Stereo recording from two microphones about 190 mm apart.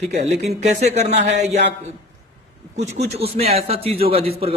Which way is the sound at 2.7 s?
35° right (ahead or behind).